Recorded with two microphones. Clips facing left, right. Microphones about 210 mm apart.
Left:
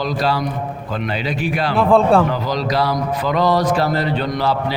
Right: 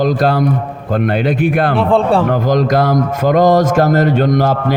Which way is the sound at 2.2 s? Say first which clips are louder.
Right 7 dB; 50° right (ahead or behind).